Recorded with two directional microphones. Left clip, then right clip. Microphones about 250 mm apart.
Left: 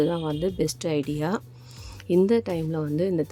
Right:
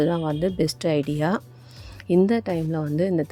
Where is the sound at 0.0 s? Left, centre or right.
Centre.